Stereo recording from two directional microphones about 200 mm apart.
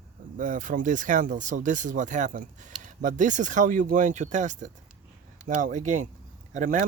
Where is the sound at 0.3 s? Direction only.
40° right (ahead or behind).